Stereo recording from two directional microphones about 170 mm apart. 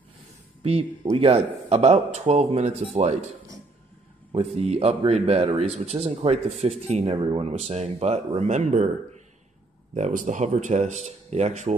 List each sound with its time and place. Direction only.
0.6 s speech: 35° right (ahead or behind)
4.3 s speech: 35° right (ahead or behind)